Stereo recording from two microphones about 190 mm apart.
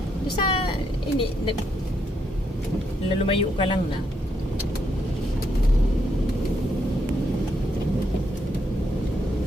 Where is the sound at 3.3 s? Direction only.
30° left (ahead or behind).